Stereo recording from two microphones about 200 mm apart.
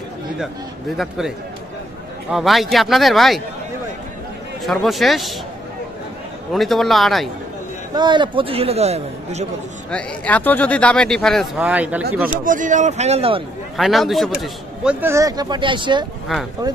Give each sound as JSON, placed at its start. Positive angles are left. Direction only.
{"t": 0.9, "sound": "speech", "side_deg": 0}
{"t": 2.3, "sound": "speech", "side_deg": 0}
{"t": 4.6, "sound": "speech", "side_deg": 0}
{"t": 6.5, "sound": "speech", "side_deg": 0}
{"t": 7.9, "sound": "a man's voice", "side_deg": -20}
{"t": 9.8, "sound": "speech", "side_deg": 5}
{"t": 12.4, "sound": "a man's voice", "side_deg": -40}
{"t": 13.7, "sound": "a man's voice", "side_deg": 0}